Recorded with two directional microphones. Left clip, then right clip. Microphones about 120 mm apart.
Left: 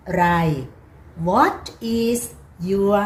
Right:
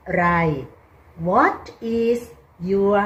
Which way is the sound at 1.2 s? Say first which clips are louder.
Even; 5° right (ahead or behind).